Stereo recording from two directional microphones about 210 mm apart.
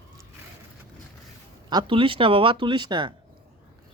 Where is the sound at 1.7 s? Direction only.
25° right (ahead or behind).